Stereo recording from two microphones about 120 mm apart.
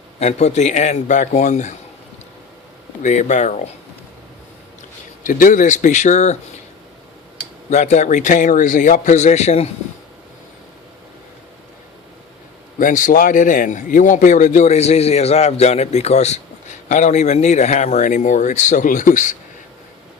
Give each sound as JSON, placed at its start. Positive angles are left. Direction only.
{"t": 0.2, "sound": "speech", "side_deg": 65}
{"t": 3.0, "sound": "speech", "side_deg": 80}
{"t": 5.2, "sound": "speech", "side_deg": 90}
{"t": 7.7, "sound": "a man's voice", "side_deg": 70}
{"t": 12.9, "sound": "speech", "side_deg": 90}